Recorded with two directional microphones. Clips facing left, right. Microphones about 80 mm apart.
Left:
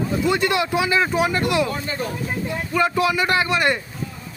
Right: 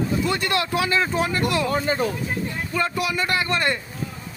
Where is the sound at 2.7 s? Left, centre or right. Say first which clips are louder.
Left 5 dB; centre.